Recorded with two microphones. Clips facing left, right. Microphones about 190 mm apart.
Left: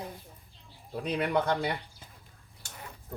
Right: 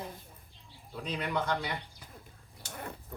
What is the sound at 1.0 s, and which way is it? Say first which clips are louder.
Speech: left 5 dB; 60° left (ahead or behind).